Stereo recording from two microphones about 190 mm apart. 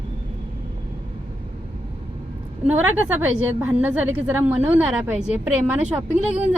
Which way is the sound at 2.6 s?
10° right (ahead or behind).